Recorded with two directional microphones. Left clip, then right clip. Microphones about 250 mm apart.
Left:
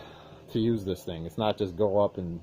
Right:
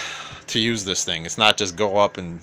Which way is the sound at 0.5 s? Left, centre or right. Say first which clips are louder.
Right 7 dB; right.